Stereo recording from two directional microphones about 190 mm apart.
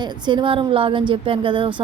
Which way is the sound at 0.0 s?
25° right (ahead or behind).